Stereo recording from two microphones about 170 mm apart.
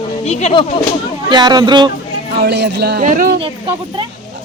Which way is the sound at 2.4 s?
90° right.